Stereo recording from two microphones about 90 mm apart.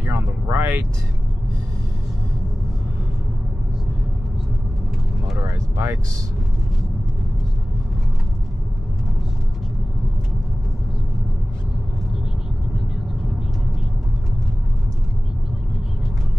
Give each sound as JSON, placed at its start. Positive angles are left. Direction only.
{"t": 0.0, "sound": "vehicle", "side_deg": -35}
{"t": 5.4, "sound": "vehicle", "side_deg": -35}